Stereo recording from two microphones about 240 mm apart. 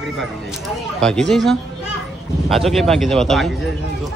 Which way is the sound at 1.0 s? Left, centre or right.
Centre.